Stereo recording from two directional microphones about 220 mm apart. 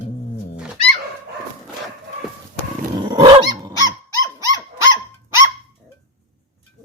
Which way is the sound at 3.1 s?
20° right (ahead or behind).